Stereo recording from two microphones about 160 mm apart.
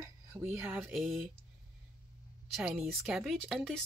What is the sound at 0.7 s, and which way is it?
Speech, centre (ahead or behind).